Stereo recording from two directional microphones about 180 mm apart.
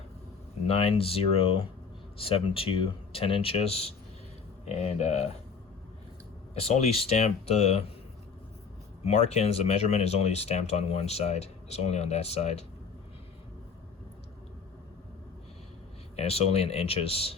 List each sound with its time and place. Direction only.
0.7 s speech: 35° left (ahead or behind)
6.5 s speech: 35° left (ahead or behind)
9.0 s speech: 35° left (ahead or behind)
16.1 s speech: 35° left (ahead or behind)